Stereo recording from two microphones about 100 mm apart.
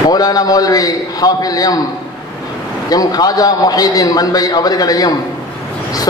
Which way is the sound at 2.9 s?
40° left (ahead or behind).